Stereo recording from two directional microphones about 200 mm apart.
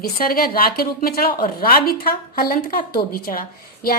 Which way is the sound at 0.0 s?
50° left (ahead or behind).